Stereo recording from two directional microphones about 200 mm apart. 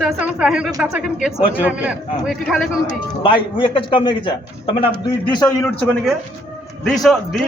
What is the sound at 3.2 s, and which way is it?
A man's voice, 25° left (ahead or behind).